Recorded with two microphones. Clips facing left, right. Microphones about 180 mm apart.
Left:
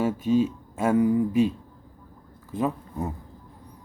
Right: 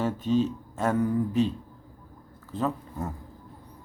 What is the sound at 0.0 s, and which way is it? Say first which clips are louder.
Speech: left 3 dB; 10° left (ahead or behind).